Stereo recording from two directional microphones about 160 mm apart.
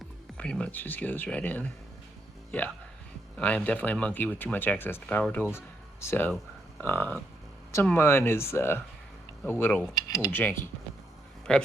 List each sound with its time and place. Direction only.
0.3 s speech: 5° left (ahead or behind)
9.9 s speech: 25° left (ahead or behind)
11.5 s speech: 5° left (ahead or behind)